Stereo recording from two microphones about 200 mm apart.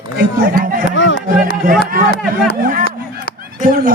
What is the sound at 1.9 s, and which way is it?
Speech, 45° right (ahead or behind).